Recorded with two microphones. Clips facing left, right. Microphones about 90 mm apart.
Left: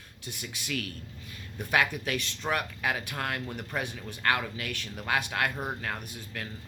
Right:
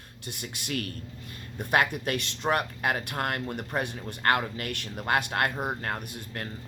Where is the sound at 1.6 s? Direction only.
30° right (ahead or behind).